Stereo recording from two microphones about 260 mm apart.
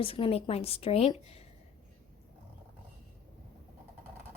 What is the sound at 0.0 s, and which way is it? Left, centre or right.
Speech, left.